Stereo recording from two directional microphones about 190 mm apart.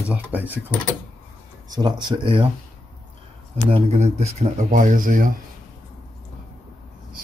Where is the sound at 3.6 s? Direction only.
35° right (ahead or behind).